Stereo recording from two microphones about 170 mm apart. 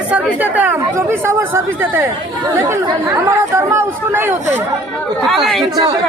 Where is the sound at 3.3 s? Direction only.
15° right (ahead or behind).